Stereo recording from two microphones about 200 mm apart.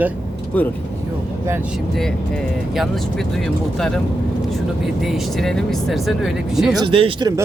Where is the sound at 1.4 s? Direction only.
10° right (ahead or behind).